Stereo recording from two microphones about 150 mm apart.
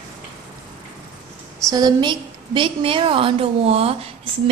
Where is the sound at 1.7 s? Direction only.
25° right (ahead or behind); by 4.1 s 40° right (ahead or behind).